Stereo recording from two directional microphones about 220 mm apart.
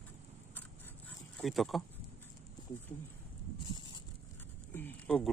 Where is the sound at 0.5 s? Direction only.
10° left (ahead or behind).